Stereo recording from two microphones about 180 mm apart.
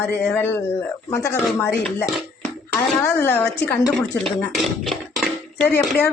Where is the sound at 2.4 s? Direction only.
5° left (ahead or behind).